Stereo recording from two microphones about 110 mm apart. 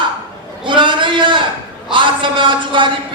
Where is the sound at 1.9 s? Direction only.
50° right (ahead or behind).